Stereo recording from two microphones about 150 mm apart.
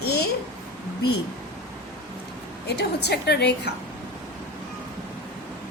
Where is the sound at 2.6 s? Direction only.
90° left.